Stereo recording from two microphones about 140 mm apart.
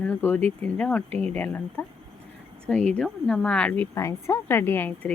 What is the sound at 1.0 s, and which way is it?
Speech, 50° right (ahead or behind).